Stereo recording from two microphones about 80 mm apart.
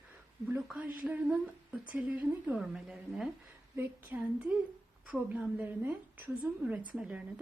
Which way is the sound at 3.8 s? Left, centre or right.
Right.